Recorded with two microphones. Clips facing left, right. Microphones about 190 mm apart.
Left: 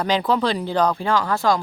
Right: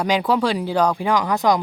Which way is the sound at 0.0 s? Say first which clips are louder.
Right 1 dB; 10° right (ahead or behind).